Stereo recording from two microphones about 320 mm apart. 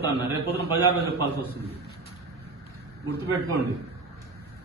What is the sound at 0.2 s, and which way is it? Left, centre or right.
Speech, centre.